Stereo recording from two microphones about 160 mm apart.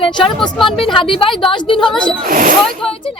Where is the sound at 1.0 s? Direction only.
35° left (ahead or behind).